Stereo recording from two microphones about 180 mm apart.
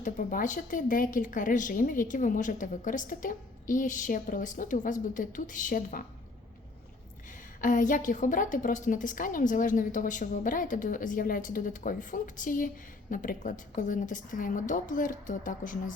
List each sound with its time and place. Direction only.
0.0 s a woman's voice: 50° left (ahead or behind)
7.3 s a woman's voice: 45° left (ahead or behind)